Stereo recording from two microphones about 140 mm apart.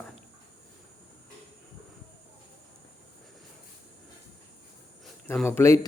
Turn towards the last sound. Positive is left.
turn(degrees=20)  # may be behind; listen again after turning